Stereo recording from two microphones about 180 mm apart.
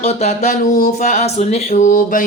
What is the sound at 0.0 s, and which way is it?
Music, 35° left (ahead or behind).